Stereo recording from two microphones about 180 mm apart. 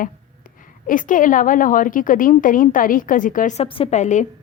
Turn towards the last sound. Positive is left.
turn(degrees=40)  # may be behind; listen again after turning